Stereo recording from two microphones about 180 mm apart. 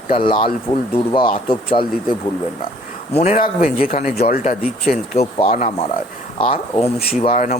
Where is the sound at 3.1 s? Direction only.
40° left (ahead or behind).